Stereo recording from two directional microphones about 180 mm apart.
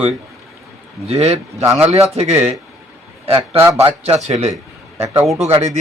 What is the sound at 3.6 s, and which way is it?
Speech, 15° right (ahead or behind).